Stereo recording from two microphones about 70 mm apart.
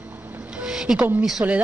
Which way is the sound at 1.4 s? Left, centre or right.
Right.